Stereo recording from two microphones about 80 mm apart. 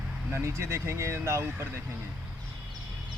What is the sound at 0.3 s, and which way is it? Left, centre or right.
A man's voice, right.